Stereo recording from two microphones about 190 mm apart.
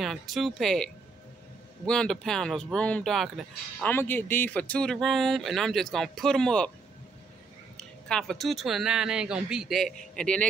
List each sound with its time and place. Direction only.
0.0 s speech: centre (ahead or behind)
7.7 s speech: centre (ahead or behind)